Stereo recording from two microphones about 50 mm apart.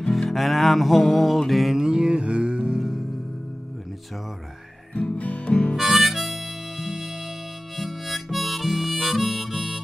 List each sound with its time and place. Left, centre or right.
0.0 s music: centre
4.9 s guitar: left
5.8 s harmonica: centre